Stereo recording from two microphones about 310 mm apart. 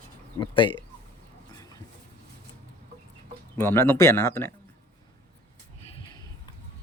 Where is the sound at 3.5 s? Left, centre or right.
Centre.